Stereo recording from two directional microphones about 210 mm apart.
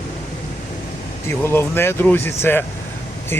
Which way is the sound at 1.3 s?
10° left (ahead or behind).